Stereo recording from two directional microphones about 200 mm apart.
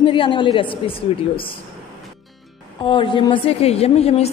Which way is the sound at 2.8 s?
25° left (ahead or behind).